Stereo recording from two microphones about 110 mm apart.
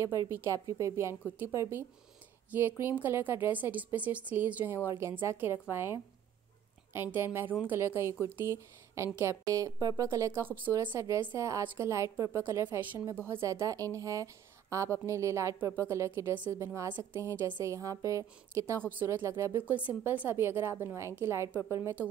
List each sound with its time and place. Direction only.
0.3 s a woman's voice: 20° right (ahead or behind)